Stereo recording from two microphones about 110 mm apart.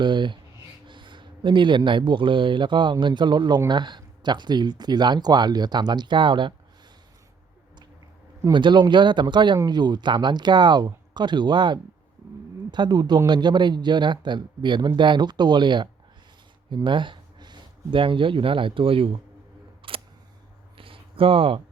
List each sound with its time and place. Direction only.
0.0 s speech: 45° right (ahead or behind)
8.5 s speech: 45° right (ahead or behind)
19.8 s single-lens reflex camera: 55° right (ahead or behind)
20.7 s a sound: 55° right (ahead or behind)